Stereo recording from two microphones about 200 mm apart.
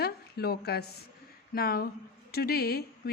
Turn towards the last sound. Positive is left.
turn(degrees=50)  # may be behind; listen again after turning